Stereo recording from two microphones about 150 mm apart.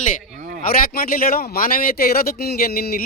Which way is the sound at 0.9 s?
75° left (ahead or behind).